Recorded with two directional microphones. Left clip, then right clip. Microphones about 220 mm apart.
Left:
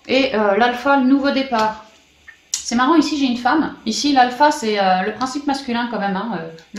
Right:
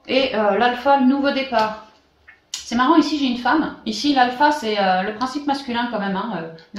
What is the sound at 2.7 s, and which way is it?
A woman's voice, 35° left (ahead or behind).